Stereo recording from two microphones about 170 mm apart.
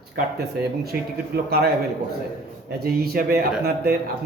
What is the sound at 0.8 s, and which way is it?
Speech, 65° right (ahead or behind).